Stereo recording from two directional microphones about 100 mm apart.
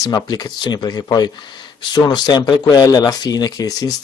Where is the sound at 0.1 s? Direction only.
40° left (ahead or behind).